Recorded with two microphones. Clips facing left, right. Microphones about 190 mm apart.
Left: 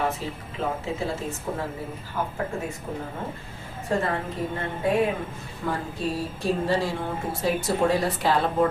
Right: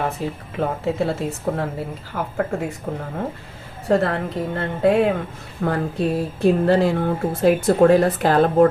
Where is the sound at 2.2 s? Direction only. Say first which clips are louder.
Right 2 dB; 90° right.